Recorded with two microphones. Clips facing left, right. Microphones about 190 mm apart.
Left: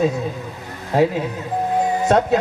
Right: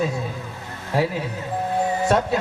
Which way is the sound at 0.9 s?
20° left (ahead or behind).